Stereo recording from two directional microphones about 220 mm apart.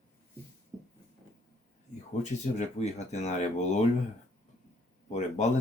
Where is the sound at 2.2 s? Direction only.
30° left (ahead or behind).